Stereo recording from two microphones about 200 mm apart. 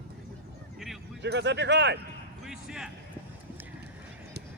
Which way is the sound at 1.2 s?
60° right (ahead or behind).